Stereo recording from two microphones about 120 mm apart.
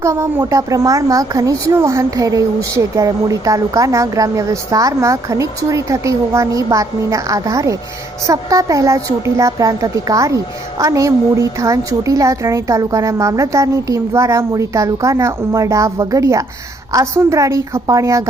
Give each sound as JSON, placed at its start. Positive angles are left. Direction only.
{"t": 0.0, "sound": "a woman's voice", "side_deg": -25}